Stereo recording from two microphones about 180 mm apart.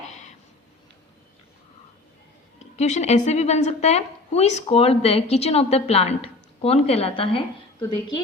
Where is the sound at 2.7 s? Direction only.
40° left (ahead or behind).